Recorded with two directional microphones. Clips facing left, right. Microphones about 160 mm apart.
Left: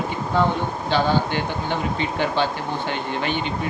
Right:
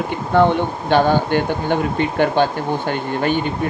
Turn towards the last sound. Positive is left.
turn(degrees=-50)  # may be behind; listen again after turning